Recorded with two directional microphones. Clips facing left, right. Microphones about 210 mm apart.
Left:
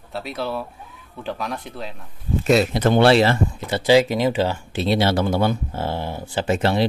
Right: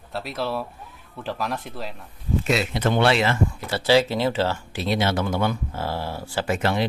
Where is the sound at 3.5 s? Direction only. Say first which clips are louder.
Left 3 dB; 20° left (ahead or behind).